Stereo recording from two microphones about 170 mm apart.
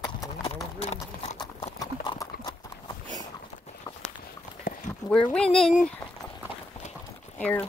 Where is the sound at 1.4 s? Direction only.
25° left (ahead or behind).